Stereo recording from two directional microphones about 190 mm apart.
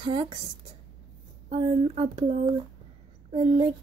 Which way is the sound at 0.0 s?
30° right (ahead or behind).